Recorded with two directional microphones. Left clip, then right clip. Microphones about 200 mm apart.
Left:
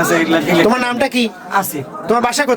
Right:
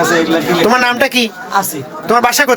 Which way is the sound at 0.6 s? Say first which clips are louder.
Right 4 dB; centre (ahead or behind).